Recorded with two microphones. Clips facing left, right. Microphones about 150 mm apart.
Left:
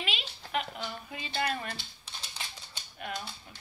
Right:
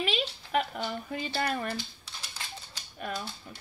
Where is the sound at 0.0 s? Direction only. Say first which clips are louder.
Right 8 dB; 35° right (ahead or behind).